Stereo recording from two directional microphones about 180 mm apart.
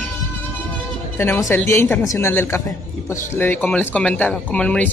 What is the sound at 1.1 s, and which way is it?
Speech, 10° left (ahead or behind).